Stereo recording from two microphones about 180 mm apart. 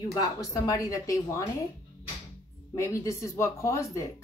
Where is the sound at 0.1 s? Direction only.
20° left (ahead or behind).